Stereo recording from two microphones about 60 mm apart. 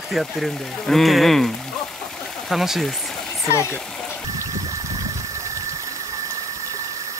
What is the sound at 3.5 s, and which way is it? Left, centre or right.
Speech, left.